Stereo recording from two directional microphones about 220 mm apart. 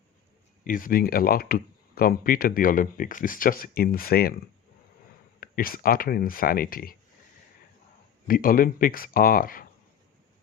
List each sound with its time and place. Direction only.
0.6 s speech: 40° left (ahead or behind)
5.4 s speech: 40° left (ahead or behind)
8.3 s speech: 40° left (ahead or behind)